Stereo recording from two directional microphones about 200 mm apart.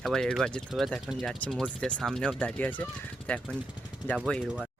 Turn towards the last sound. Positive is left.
turn(degrees=0)  # may be behind; listen again after turning